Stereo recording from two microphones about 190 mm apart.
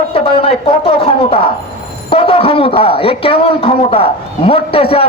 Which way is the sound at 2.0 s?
30° left (ahead or behind).